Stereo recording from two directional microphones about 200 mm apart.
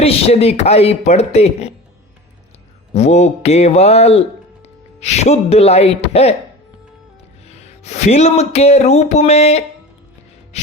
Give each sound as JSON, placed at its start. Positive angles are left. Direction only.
{"t": 0.0, "sound": "speech", "side_deg": 30}
{"t": 2.9, "sound": "speech", "side_deg": 35}
{"t": 7.9, "sound": "speech", "side_deg": 35}
{"t": 10.5, "sound": "music", "side_deg": 35}